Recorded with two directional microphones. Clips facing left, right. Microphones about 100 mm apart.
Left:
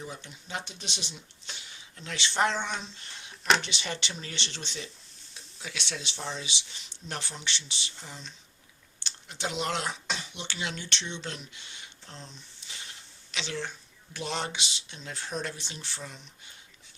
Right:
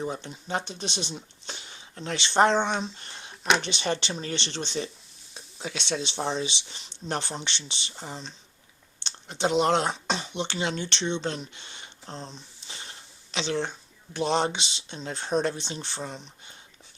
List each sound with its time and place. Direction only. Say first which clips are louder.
0.0 s speech: right 9 dB; 35° right (ahead or behind)
7.9 s speech: right 7 dB; 40° right (ahead or behind)
9.0 s speech: right 8 dB; 25° right (ahead or behind)